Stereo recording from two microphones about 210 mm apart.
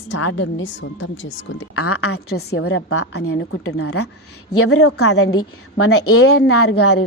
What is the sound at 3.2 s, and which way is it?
A woman's voice, 90° left.